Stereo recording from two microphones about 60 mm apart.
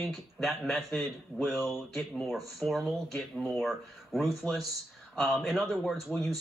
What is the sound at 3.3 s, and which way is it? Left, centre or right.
Speech, left.